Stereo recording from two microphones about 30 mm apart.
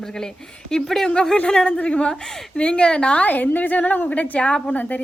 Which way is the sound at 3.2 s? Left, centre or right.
Left.